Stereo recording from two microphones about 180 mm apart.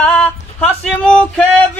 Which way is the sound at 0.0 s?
5° left (ahead or behind).